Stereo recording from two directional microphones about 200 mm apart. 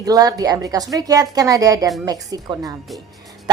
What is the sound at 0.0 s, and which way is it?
A woman's voice, 20° right (ahead or behind).